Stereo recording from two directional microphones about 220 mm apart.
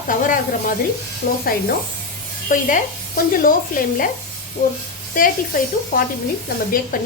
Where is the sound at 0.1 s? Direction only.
35° left (ahead or behind).